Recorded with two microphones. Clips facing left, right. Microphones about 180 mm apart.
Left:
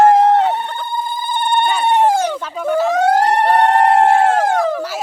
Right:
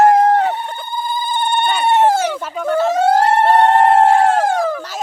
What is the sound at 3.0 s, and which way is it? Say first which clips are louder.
Police car: right 2 dB; 15° left (ahead or behind).